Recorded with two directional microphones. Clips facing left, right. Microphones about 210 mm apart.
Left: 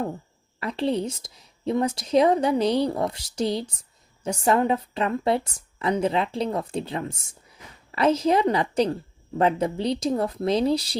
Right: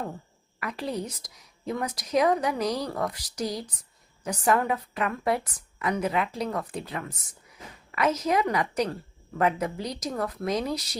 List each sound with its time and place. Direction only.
0.6 s a woman's voice: 25° left (ahead or behind)